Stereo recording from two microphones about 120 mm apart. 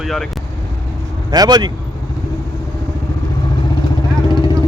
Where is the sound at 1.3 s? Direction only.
35° right (ahead or behind).